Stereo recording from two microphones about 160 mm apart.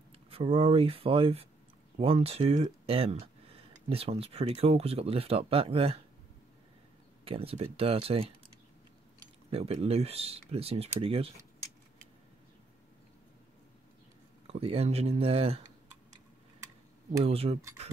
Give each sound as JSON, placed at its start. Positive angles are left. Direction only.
{"t": 0.3, "sound": "speech", "side_deg": -35}
{"t": 7.2, "sound": "speech", "side_deg": -35}
{"t": 9.5, "sound": "speech", "side_deg": -40}
{"t": 14.5, "sound": "speech", "side_deg": -35}
{"t": 17.2, "sound": "speech", "side_deg": -40}